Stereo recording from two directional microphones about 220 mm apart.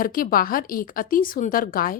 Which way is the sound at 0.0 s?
40° left (ahead or behind).